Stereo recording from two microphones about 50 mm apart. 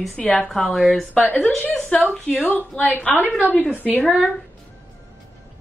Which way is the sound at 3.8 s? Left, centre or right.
Left.